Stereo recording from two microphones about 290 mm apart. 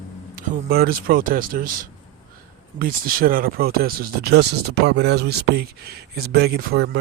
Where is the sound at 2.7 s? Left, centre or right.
Right.